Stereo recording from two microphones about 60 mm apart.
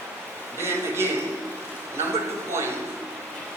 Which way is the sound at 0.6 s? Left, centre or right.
Right.